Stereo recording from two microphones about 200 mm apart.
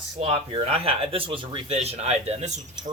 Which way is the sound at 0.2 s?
30° right (ahead or behind).